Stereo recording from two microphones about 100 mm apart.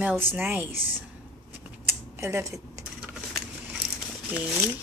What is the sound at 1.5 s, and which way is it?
Scissors, 25° right (ahead or behind).